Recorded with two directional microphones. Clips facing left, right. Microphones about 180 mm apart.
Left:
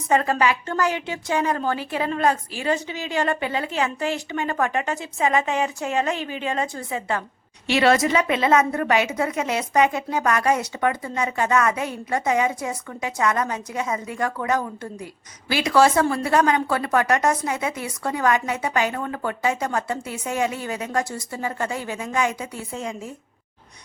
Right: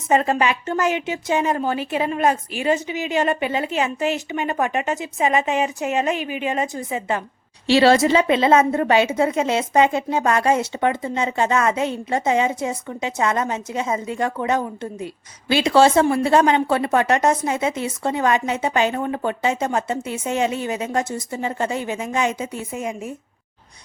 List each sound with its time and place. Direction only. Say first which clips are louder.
0.1 s a woman's voice: right 2 dB; 20° right (ahead or behind)
7.7 s a woman's voice: right 4 dB; 30° right (ahead or behind)